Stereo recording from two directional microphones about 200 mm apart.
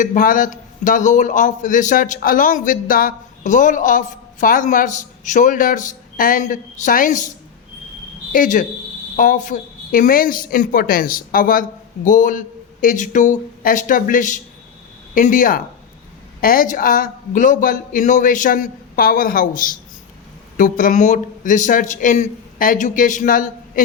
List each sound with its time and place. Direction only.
0.0 s a man's voice: 40° left (ahead or behind)